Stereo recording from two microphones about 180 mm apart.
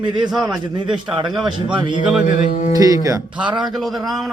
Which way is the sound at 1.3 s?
5° right (ahead or behind).